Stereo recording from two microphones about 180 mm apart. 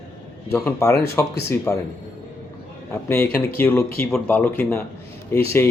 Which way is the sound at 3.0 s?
15° left (ahead or behind).